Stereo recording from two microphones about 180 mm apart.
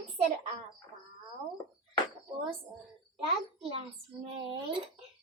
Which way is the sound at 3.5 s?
35° right (ahead or behind).